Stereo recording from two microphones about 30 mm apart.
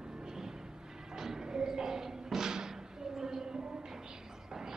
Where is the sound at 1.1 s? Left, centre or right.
Centre.